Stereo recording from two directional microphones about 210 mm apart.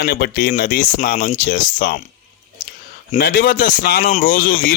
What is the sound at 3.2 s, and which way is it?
A man's voice, 45° left (ahead or behind).